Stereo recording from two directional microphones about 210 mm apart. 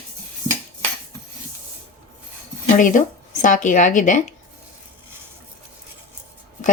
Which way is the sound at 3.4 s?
35° left (ahead or behind).